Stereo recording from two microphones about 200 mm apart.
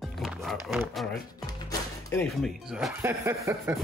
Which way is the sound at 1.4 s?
15° left (ahead or behind).